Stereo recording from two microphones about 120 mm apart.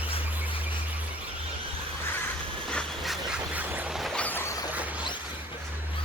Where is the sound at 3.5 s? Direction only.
15° right (ahead or behind).